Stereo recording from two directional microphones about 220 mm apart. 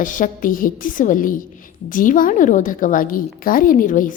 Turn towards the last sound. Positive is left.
turn(degrees=35)  # may be behind; listen again after turning